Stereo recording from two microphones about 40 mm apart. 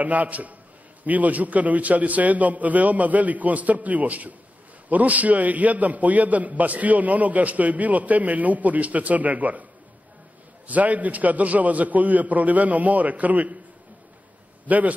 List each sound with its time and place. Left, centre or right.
0.0 s a man's voice: right
10.7 s a man's voice: right
14.7 s a man's voice: right